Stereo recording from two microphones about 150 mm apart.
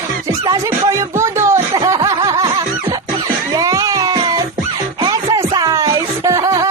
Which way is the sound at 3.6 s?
20° right (ahead or behind).